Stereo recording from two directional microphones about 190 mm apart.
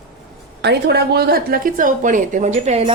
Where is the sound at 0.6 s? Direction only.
60° right (ahead or behind); by 2.8 s 35° right (ahead or behind).